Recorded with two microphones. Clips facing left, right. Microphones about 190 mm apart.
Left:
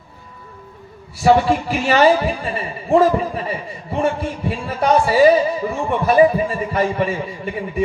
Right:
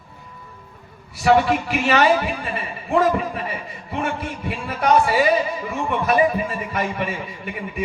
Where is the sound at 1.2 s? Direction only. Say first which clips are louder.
Left 2 dB; 35° left (ahead or behind).